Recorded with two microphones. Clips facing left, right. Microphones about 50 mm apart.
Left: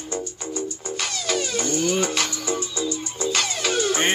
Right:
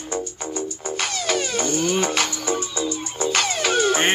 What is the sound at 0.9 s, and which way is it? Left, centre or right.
Music, right.